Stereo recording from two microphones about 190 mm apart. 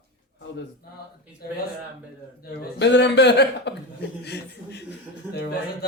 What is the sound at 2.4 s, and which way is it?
Speech, 55° left (ahead or behind).